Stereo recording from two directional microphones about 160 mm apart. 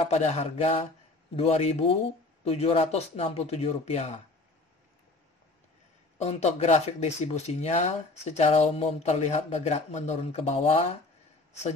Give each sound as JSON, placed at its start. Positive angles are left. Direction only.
{"t": 0.0, "sound": "speech", "side_deg": 45}
{"t": 6.1, "sound": "speech", "side_deg": 45}